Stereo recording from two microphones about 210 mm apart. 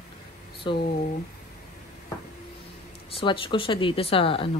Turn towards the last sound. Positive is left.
turn(degrees=25)  # may be behind; listen again after turning